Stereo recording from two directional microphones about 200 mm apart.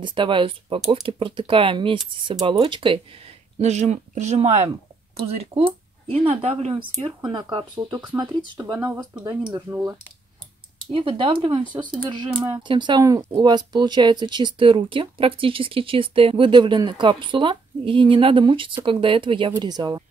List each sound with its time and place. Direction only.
0.0 s speech: 25° right (ahead or behind)
10.9 s speech: 25° right (ahead or behind)